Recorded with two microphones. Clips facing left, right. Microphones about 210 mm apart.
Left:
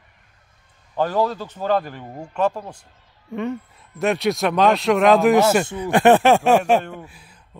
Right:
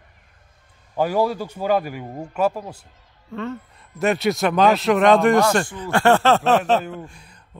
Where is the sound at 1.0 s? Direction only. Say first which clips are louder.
Right 1 dB; 10° right (ahead or behind).